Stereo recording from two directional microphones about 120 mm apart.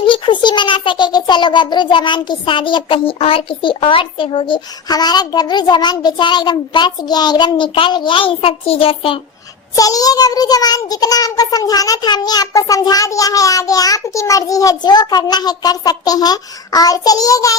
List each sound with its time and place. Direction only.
0.0 s a child's voice: 45° left (ahead or behind)
9.7 s a child's voice: 30° left (ahead or behind)